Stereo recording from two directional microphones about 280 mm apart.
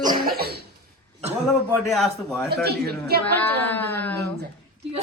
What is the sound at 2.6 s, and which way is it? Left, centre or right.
Speech, right.